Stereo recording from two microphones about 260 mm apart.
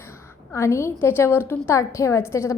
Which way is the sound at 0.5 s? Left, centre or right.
Centre.